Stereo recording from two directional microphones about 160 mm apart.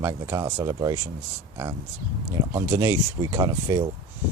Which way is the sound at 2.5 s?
15° right (ahead or behind).